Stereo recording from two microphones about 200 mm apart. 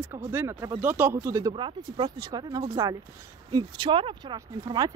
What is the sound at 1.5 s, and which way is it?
Speech, 25° right (ahead or behind).